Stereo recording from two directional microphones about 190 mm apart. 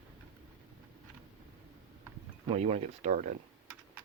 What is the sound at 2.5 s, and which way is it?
Speech, 35° right (ahead or behind).